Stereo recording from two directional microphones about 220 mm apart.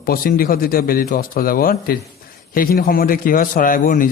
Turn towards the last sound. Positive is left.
turn(degrees=40)  # may be behind; listen again after turning